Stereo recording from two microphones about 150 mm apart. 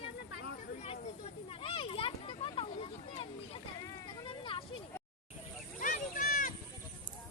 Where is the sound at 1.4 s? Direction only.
35° left (ahead or behind).